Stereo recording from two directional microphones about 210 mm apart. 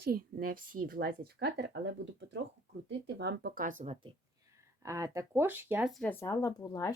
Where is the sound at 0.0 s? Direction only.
45° right (ahead or behind).